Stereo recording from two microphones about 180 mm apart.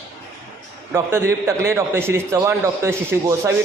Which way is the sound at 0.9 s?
15° right (ahead or behind).